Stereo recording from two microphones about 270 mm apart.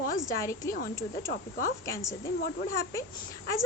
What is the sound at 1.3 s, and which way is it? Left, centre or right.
Speech, left.